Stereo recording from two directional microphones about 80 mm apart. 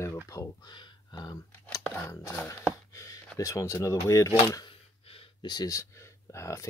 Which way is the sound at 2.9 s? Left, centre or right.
Left.